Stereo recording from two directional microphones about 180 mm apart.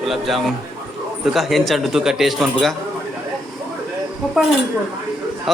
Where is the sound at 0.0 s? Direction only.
Centre (ahead or behind).